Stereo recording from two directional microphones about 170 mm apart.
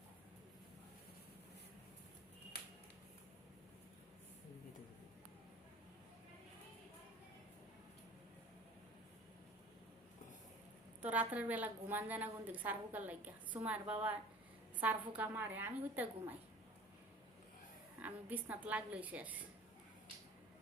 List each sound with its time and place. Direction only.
11.0 s a woman's voice: 10° right (ahead or behind)
18.0 s a woman's voice: 10° right (ahead or behind)